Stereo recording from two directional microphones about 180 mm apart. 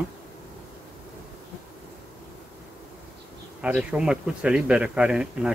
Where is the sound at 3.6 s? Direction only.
5° right (ahead or behind).